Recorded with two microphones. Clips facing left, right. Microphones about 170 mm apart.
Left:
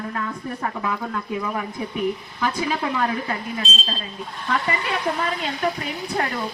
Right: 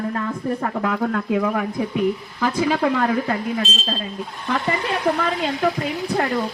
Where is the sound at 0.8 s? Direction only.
65° right (ahead or behind).